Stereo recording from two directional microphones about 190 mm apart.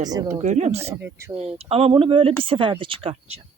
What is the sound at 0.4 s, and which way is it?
Speech, 35° right (ahead or behind).